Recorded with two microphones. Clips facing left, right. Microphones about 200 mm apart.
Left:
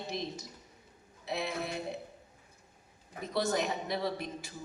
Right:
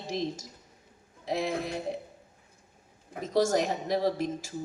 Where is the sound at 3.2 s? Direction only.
45° right (ahead or behind).